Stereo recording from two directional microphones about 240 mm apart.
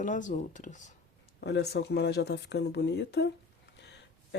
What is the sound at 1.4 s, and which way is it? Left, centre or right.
Speech, left.